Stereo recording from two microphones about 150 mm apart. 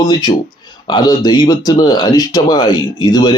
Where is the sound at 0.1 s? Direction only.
25° left (ahead or behind).